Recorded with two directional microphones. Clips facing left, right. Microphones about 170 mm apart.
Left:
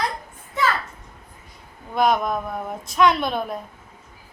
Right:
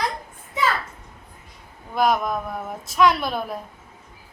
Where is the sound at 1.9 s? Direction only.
Centre (ahead or behind).